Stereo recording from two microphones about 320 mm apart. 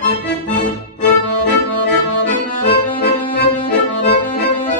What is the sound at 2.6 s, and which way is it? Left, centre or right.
Accordion, left.